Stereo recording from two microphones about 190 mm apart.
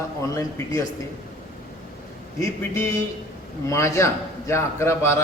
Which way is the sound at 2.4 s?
15° left (ahead or behind).